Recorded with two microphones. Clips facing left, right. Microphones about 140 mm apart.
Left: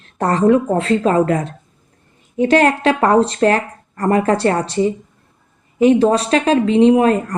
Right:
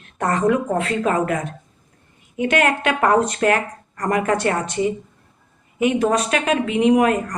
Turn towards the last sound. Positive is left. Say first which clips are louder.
# left 4 dB
turn(degrees=30)  # may be behind; listen again after turning